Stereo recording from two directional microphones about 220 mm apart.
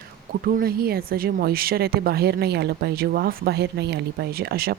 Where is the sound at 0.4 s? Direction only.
45° right (ahead or behind).